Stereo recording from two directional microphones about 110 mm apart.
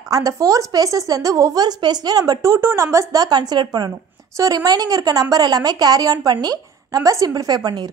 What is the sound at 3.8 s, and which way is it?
A woman's voice, 30° right (ahead or behind).